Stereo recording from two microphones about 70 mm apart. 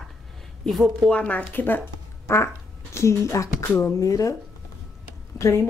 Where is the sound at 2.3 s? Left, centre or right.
Left.